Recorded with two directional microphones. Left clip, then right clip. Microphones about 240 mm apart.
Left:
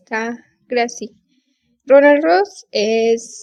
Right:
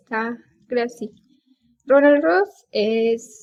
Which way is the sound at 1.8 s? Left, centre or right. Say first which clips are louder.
Left 4 dB; left.